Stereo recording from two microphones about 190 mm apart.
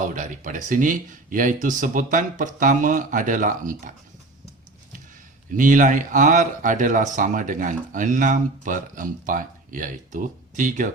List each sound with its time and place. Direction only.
0.0 s speech: 40° right (ahead or behind)
5.5 s speech: 45° right (ahead or behind)